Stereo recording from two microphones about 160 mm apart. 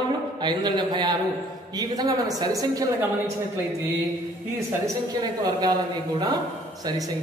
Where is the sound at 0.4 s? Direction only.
30° right (ahead or behind).